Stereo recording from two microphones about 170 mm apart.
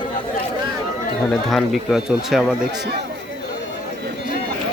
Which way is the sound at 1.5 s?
Centre (ahead or behind).